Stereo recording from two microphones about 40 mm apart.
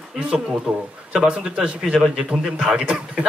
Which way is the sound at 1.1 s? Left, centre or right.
Right.